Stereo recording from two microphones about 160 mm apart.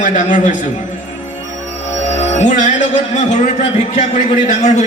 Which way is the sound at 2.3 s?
50° left (ahead or behind).